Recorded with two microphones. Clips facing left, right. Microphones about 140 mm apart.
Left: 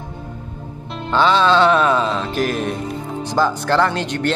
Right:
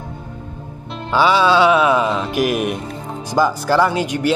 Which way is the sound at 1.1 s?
10° right (ahead or behind).